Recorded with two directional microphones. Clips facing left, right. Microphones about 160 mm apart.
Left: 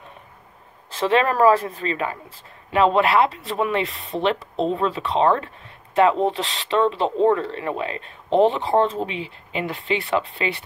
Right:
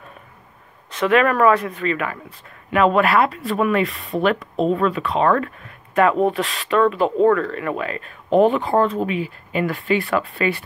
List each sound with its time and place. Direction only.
0.8 s speech: 30° left (ahead or behind)
3.9 s speech: centre (ahead or behind)
4.2 s speech: 25° left (ahead or behind)